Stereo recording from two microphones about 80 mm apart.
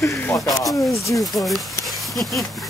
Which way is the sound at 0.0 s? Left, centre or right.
Left.